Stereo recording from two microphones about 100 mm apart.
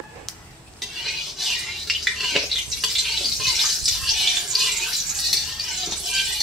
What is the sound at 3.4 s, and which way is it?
Water, centre (ahead or behind).